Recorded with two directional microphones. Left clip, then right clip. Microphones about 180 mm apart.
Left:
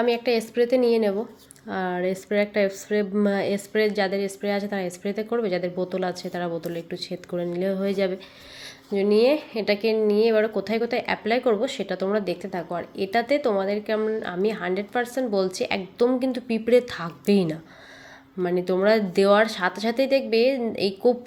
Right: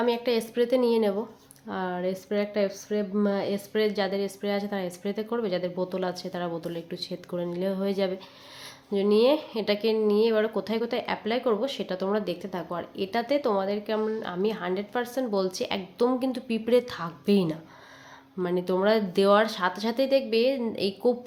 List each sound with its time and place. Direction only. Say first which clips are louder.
0.0 s speech: left 3 dB; 10° left (ahead or behind)